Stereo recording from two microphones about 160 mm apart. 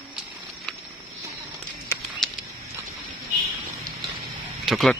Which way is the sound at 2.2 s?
Centre (ahead or behind).